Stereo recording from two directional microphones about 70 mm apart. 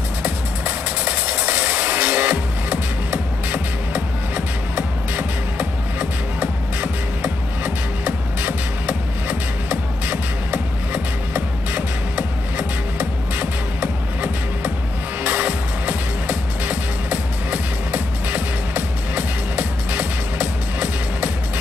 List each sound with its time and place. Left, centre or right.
0.2 s music: right